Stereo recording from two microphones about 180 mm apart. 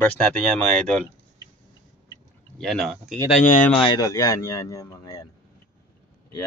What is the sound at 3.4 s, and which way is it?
Speech, 45° left (ahead or behind).